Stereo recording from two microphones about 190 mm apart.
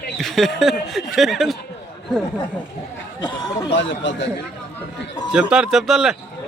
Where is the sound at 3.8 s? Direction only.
70° left (ahead or behind).